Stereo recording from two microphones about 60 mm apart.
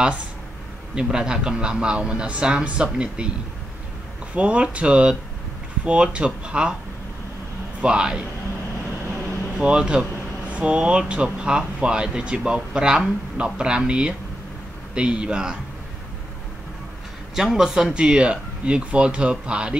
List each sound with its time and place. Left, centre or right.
0.9 s speech: centre
4.4 s speech: centre
7.8 s speech: centre
9.6 s speech: centre
17.4 s speech: centre